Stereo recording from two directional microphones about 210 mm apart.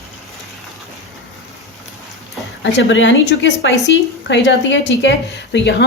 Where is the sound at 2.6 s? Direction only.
60° left (ahead or behind).